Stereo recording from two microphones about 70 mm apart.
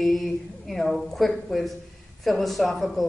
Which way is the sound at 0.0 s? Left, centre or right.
Centre.